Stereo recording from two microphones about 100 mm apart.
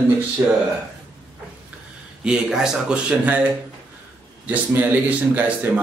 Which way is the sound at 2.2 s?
5° right (ahead or behind).